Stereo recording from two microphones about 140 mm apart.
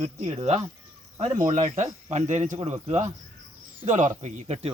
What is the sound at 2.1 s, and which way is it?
Speech, 55° right (ahead or behind).